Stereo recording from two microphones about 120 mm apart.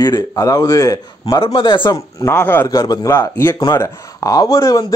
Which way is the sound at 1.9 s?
20° left (ahead or behind).